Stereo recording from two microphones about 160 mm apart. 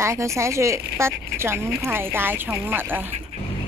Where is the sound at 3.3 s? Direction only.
45° right (ahead or behind).